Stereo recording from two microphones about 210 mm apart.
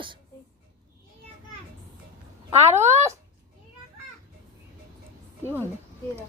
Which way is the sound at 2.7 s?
15° right (ahead or behind).